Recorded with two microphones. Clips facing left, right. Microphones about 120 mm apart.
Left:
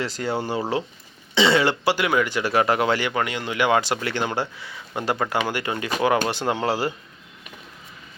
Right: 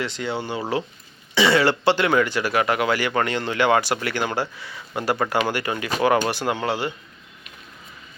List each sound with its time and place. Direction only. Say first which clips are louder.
0.0 s speech: left 1 dB; 40° left (ahead or behind)
1.4 s speech: right 1 dB; 20° left (ahead or behind)
1.8 s speech: right 2 dB; 10° left (ahead or behind)
2.4 s speech: left 1 dB; 30° left (ahead or behind)
3.2 s speech: right 2 dB; 10° left (ahead or behind); by 6.9 s 35° left (ahead or behind)